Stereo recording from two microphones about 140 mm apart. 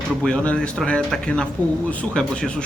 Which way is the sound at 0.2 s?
5° left (ahead or behind).